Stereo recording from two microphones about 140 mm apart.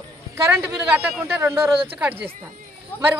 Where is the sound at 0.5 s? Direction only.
15° right (ahead or behind).